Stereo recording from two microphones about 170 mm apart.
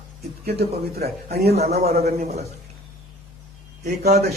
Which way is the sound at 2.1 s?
40° right (ahead or behind).